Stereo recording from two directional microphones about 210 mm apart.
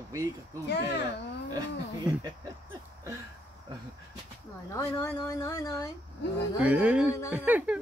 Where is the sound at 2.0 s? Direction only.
20° right (ahead or behind).